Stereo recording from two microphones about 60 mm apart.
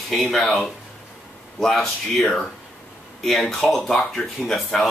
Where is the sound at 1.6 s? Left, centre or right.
Centre.